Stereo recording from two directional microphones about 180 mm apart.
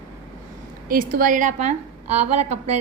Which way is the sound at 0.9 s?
50° right (ahead or behind).